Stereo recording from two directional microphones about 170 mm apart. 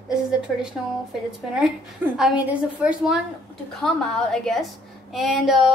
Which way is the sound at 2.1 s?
5° right (ahead or behind).